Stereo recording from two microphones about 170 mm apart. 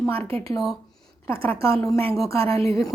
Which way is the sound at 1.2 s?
15° left (ahead or behind).